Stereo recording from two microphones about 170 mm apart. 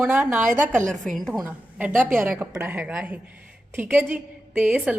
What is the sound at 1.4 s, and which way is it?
A woman's voice, 10° right (ahead or behind).